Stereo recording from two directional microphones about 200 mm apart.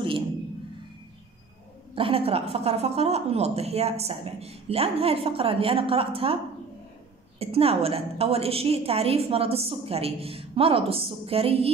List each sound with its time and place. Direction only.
2.0 s a woman's voice: 30° right (ahead or behind)